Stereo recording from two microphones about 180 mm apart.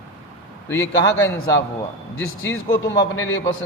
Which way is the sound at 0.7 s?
15° left (ahead or behind).